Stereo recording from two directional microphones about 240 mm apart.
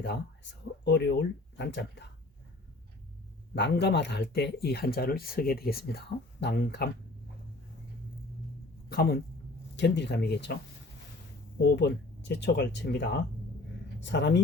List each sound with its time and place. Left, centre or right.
0.9 s speech: left
3.5 s speech: left
8.9 s speech: left
11.8 s speech: left